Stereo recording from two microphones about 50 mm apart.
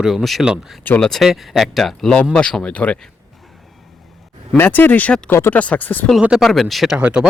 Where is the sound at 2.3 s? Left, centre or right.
Centre.